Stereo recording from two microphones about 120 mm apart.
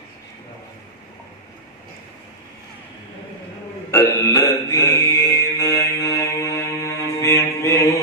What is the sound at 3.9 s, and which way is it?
Mantra, 25° left (ahead or behind).